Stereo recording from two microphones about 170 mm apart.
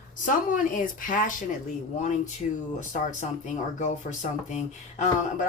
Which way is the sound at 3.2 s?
45° left (ahead or behind).